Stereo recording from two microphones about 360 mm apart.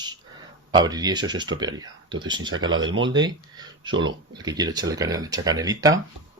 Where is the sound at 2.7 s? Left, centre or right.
Right.